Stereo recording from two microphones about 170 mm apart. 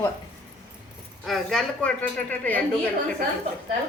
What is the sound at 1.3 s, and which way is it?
A woman's voice, centre (ahead or behind).